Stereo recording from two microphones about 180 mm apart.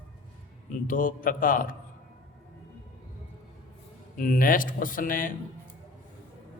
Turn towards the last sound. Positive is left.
turn(degrees=50)  # may be behind; listen again after turning